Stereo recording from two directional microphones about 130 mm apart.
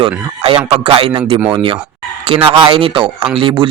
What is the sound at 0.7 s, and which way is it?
A man's voice, 50° right (ahead or behind).